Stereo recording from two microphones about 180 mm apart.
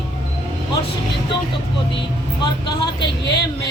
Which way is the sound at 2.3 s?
25° left (ahead or behind).